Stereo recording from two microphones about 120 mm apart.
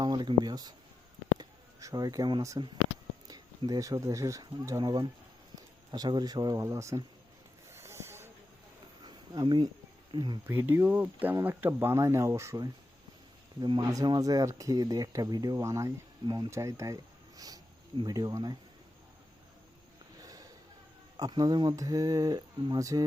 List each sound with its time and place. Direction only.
0.0 s speech: 40° right (ahead or behind)
1.4 s a sound: 30° right (ahead or behind)
3.2 s speech: 35° right (ahead or behind)
7.7 s a sound: 20° right (ahead or behind)
9.0 s a sound: 35° right (ahead or behind)
10.1 s speech: 40° right (ahead or behind)
10.4 s speech: 20° right (ahead or behind); by 16.5 s 35° right (ahead or behind)
16.5 s speech: 25° right (ahead or behind)
20.2 s music: 30° right (ahead or behind)
21.2 s speech: 35° right (ahead or behind)